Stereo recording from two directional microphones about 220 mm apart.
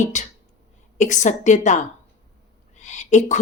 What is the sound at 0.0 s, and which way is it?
A woman's voice, 35° left (ahead or behind).